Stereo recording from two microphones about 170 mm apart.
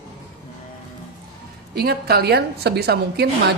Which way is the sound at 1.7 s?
65° right (ahead or behind).